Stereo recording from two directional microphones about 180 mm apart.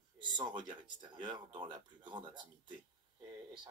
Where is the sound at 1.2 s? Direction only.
25° right (ahead or behind).